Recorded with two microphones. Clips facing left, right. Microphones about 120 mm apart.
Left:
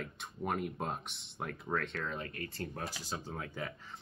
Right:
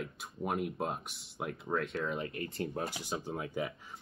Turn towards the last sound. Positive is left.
turn(degrees=-15)  # may be behind; listen again after turning